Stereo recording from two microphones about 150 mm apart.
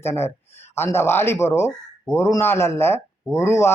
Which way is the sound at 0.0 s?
15° left (ahead or behind).